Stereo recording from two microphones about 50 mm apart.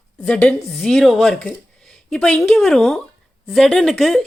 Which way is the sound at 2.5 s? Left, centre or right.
Centre.